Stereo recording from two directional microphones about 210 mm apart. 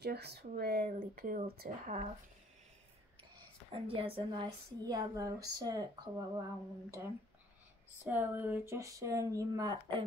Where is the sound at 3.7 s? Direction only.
25° right (ahead or behind).